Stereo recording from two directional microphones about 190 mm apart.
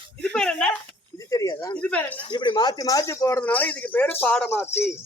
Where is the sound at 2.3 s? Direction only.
25° left (ahead or behind).